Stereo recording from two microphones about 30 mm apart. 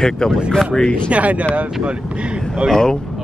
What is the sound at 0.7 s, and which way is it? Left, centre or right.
Speech, left.